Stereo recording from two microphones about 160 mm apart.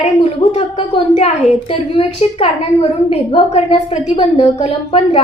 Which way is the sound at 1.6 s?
40° left (ahead or behind).